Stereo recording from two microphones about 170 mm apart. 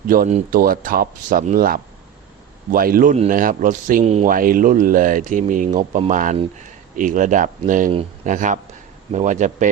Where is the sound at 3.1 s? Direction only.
45° right (ahead or behind).